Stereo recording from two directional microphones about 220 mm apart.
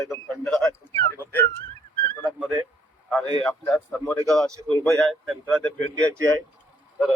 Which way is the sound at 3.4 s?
5° left (ahead or behind).